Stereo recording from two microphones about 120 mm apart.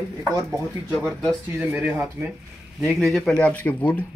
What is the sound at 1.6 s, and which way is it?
Speech, 15° right (ahead or behind).